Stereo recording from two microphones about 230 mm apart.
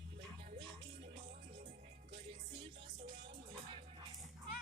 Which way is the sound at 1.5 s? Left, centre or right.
Right.